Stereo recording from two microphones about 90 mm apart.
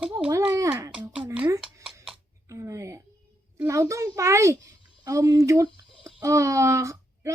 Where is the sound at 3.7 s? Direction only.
35° right (ahead or behind).